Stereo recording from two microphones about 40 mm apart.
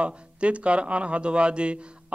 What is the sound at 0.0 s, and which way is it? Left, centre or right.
Music, right.